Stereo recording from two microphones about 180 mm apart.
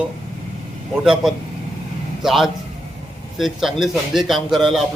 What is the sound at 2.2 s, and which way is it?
A man's voice, centre (ahead or behind).